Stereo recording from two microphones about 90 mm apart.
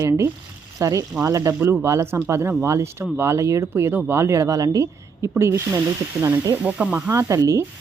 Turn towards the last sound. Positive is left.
turn(degrees=-35)  # may be behind; listen again after turning